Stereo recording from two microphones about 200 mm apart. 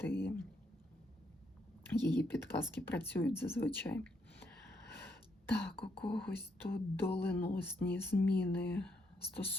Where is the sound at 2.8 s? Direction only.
10° left (ahead or behind).